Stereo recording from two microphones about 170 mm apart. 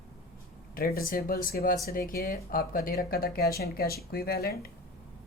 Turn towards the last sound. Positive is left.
turn(degrees=65)  # may be behind; listen again after turning